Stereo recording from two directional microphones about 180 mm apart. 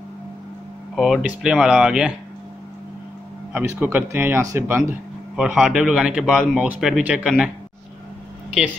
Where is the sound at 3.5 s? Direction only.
10° right (ahead or behind).